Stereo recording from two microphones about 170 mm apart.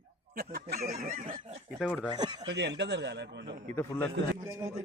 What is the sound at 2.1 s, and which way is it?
Speech, 25° right (ahead or behind).